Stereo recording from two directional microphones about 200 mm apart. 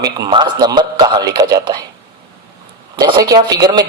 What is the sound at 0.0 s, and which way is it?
A man's voice, 20° right (ahead or behind).